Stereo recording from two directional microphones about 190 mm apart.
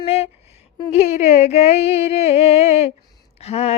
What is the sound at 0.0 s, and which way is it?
Speech, 35° left (ahead or behind).